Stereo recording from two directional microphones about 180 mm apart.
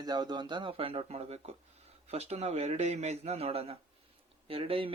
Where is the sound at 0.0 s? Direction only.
25° right (ahead or behind).